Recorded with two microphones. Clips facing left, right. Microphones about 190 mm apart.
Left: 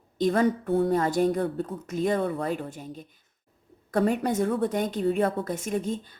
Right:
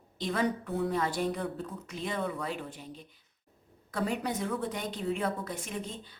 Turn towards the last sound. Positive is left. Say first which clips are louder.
# left 9 dB
turn(degrees=45)  # may be behind; listen again after turning